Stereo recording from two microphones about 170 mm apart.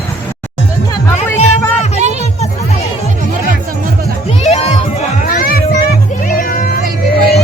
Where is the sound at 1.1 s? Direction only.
40° left (ahead or behind).